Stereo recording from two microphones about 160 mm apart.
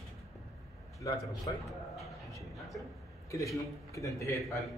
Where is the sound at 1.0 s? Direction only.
25° left (ahead or behind).